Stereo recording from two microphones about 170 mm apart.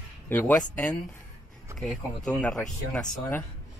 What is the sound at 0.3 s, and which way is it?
Speech, 10° left (ahead or behind).